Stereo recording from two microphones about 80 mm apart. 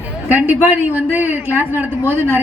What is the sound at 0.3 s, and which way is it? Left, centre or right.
A man's voice, right.